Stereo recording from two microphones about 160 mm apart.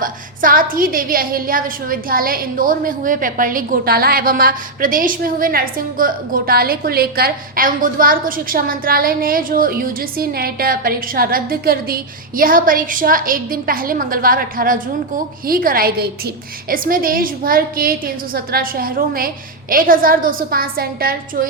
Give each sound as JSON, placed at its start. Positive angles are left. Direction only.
{"t": 0.0, "sound": "a woman's voice", "side_deg": -60}